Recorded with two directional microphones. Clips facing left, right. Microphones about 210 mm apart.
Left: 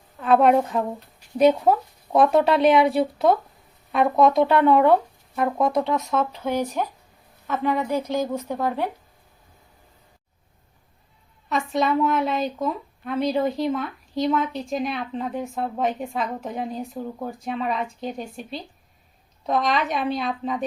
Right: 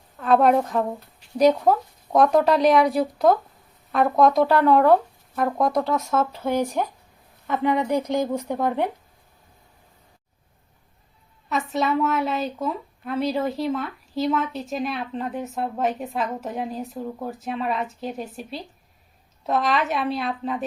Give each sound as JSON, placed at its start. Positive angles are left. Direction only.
{"t": 0.2, "sound": "a sound", "side_deg": 5}
{"t": 0.7, "sound": "speech", "side_deg": 0}
{"t": 7.4, "sound": "speech", "side_deg": -15}
{"t": 11.4, "sound": "speech", "side_deg": -5}